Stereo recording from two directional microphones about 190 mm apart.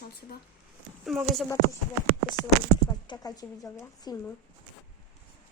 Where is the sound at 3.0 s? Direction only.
20° left (ahead or behind).